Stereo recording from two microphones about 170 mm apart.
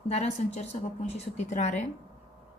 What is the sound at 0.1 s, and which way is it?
A woman's voice, 40° left (ahead or behind).